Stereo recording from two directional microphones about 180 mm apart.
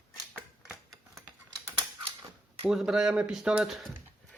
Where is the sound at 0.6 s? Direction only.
Centre (ahead or behind).